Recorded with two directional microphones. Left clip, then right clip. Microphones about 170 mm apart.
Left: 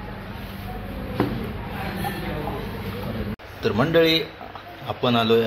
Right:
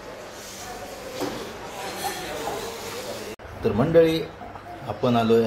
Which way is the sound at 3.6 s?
Centre (ahead or behind).